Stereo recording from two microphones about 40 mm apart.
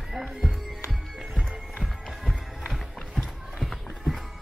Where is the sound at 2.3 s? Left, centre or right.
Centre.